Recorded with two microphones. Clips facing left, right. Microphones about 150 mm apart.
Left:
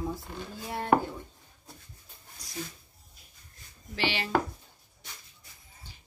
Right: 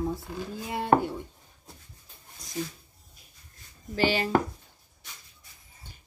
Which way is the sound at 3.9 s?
45° right (ahead or behind).